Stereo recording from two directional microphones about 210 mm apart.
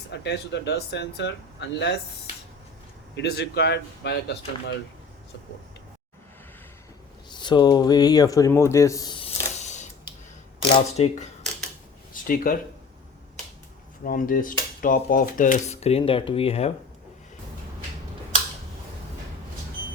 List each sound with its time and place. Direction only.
0.1 s speech: 55° left (ahead or behind)
3.2 s speech: 55° left (ahead or behind)
7.3 s speech: 20° left (ahead or behind)
10.8 s dishes: 30° left (ahead or behind)
12.1 s a sound: 40° left (ahead or behind)
14.0 s dishes: 40° left (ahead or behind)